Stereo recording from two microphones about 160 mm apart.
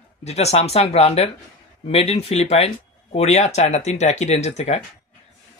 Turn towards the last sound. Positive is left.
turn(degrees=45)  # may be behind; listen again after turning